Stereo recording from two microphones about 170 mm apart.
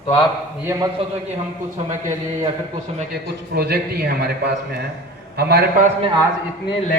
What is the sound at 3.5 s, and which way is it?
A man's voice, 70° right (ahead or behind).